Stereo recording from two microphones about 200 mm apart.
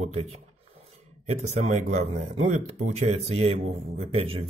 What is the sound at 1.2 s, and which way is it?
Speech, 35° right (ahead or behind).